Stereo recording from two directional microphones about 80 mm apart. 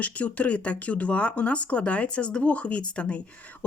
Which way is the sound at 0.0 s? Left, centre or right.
Centre.